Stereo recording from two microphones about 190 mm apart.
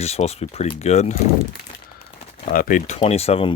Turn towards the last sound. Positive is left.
turn(degrees=30)  # may be behind; listen again after turning